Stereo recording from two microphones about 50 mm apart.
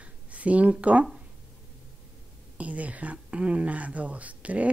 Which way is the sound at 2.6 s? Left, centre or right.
Right.